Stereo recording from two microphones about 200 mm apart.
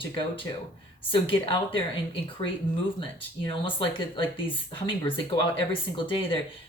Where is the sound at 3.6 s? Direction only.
25° left (ahead or behind).